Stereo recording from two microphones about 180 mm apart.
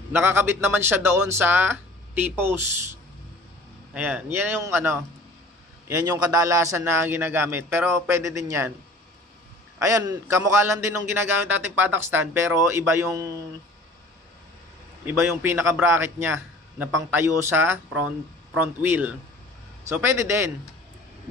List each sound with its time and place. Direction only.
0.1 s a man's voice: 10° right (ahead or behind)
9.8 s a man's voice: 15° right (ahead or behind)
15.0 s a man's voice: 10° right (ahead or behind)